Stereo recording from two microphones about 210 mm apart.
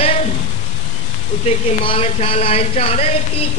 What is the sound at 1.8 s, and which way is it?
A man's voice, 30° left (ahead or behind).